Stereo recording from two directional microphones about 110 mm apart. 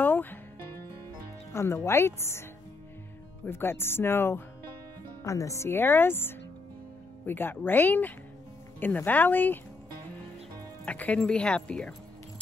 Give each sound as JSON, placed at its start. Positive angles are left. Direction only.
{"t": 0.0, "sound": "music", "side_deg": 20}
{"t": 1.5, "sound": "speech", "side_deg": 25}
{"t": 3.4, "sound": "speech", "side_deg": 20}
{"t": 10.9, "sound": "speech", "side_deg": 10}